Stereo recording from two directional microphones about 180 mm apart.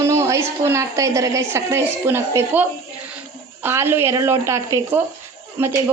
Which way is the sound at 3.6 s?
15° right (ahead or behind).